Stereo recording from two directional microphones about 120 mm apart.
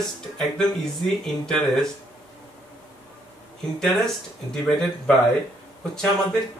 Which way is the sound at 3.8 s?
5° left (ahead or behind).